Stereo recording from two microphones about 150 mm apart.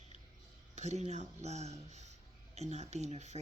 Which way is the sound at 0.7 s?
50° right (ahead or behind).